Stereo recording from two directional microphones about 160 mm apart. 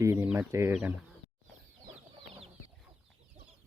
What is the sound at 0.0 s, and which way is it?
Speech, 15° right (ahead or behind).